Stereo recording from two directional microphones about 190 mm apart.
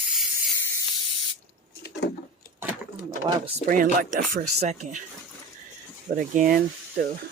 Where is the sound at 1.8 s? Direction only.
65° left (ahead or behind).